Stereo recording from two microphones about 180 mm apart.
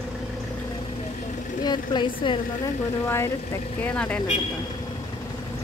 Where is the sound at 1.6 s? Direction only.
25° left (ahead or behind).